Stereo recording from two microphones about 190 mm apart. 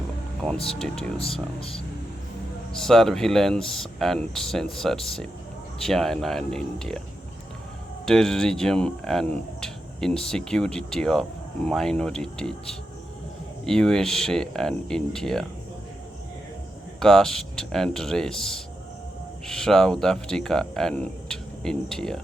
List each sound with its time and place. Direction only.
0.7 s speech: 5° left (ahead or behind)
1.2 s speech: 30° left (ahead or behind)
2.7 s speech: centre (ahead or behind)
8.0 s speech: 5° left (ahead or behind)
17.0 s speech: centre (ahead or behind)